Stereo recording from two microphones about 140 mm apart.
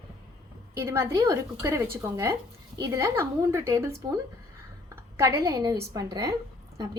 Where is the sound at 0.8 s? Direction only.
20° right (ahead or behind).